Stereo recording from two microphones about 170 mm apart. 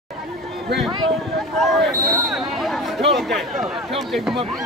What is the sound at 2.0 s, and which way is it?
Speech, 20° right (ahead or behind).